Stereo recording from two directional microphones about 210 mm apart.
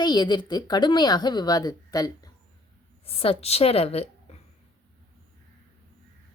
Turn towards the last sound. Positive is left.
turn(degrees=30)  # may be behind; listen again after turning